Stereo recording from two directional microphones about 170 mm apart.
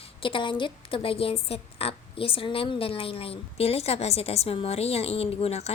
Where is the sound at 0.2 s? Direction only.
30° left (ahead or behind).